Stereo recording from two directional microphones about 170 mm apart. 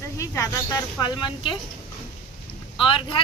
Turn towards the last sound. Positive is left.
turn(degrees=30)  # may be behind; listen again after turning